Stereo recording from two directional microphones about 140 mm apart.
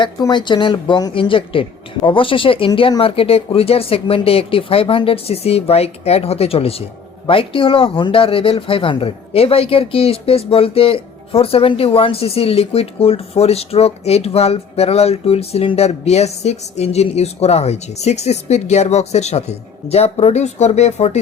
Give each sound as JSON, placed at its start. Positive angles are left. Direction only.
{"t": 0.0, "sound": "a woman's voice", "side_deg": 30}